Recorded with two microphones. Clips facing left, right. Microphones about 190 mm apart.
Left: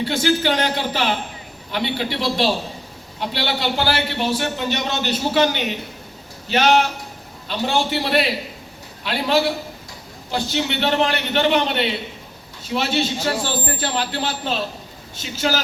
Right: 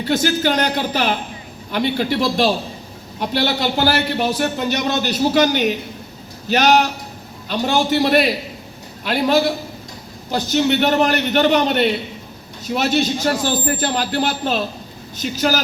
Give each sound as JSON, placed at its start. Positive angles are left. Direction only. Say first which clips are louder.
{"t": 0.0, "sound": "a man's voice", "louder": "right 1 dB", "side_deg": -45}